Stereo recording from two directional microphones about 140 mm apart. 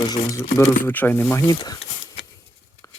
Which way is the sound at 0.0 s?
25° left (ahead or behind).